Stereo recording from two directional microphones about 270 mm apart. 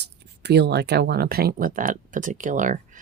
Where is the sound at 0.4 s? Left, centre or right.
Right.